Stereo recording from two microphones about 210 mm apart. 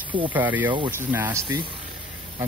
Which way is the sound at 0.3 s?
10° right (ahead or behind).